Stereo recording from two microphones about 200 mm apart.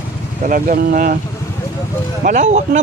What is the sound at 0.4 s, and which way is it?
Speech, 45° right (ahead or behind).